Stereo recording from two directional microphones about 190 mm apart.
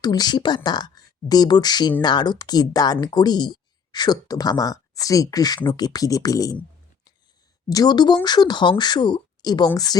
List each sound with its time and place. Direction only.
0.0 s speech: 20° left (ahead or behind)
7.7 s speech: 20° left (ahead or behind)